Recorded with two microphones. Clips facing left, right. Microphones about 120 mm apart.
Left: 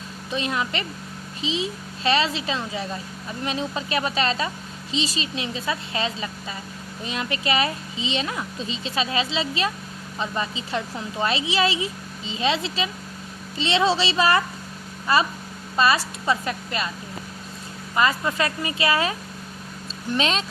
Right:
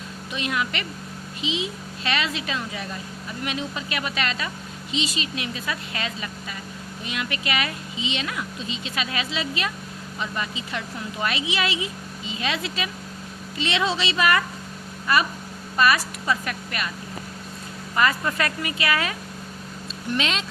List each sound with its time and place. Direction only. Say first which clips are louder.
0.3 s a child's voice: left 1 dB; 30° left (ahead or behind)
17.9 s speech: left 1 dB; 20° left (ahead or behind)
20.1 s speech: left 3 dB; 35° left (ahead or behind)